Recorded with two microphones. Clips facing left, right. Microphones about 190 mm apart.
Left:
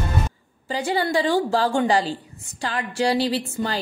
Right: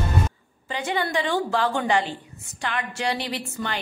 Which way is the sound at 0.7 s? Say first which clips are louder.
Left 4 dB; 35° left (ahead or behind).